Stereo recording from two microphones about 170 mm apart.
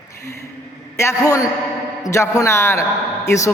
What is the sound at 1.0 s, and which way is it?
A man's voice, 15° left (ahead or behind).